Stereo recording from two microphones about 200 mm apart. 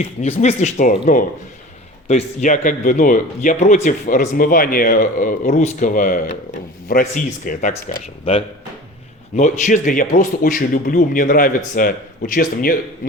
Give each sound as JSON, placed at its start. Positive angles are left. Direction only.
{"t": 0.0, "sound": "speech", "side_deg": 35}
{"t": 2.0, "sound": "a man's voice", "side_deg": 35}